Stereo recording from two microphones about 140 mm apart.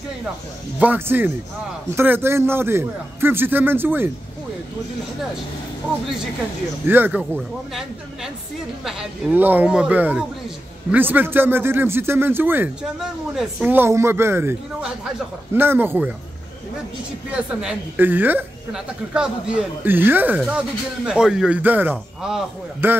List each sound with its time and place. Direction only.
0.7 s a woman's voice: 15° right (ahead or behind)
6.9 s a woman's voice: 10° right (ahead or behind)
9.3 s a woman's voice: 15° right (ahead or behind)
14.8 s a man's voice: 5° right (ahead or behind)
15.6 s a woman's voice: 15° right (ahead or behind)
17.3 s a woman's voice: 5° right (ahead or behind)
22.8 s a woman's voice: 15° right (ahead or behind)